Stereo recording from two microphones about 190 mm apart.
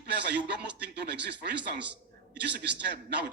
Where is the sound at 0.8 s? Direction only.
65° right (ahead or behind).